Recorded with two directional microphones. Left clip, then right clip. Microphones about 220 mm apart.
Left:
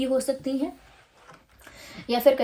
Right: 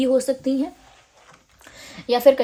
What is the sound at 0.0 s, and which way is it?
Speech, 45° right (ahead or behind).